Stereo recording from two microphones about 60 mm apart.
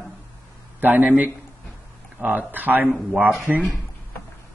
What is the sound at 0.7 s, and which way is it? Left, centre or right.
Speech, right.